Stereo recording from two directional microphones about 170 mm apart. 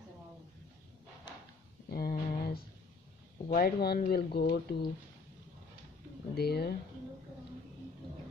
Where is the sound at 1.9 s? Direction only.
65° left (ahead or behind).